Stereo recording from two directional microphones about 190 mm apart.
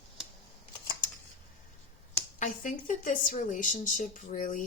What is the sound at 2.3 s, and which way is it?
A woman's voice, 40° left (ahead or behind).